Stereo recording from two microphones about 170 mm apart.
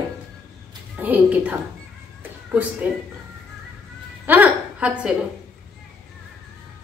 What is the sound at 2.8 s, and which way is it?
Speech, 10° right (ahead or behind).